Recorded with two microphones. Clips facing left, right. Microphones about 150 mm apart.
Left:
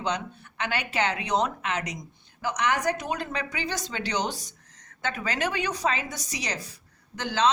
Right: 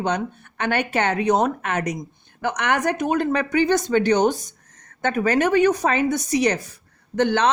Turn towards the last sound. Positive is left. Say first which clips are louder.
# right 6 dB
turn(degrees=-55)  # may be behind; listen again after turning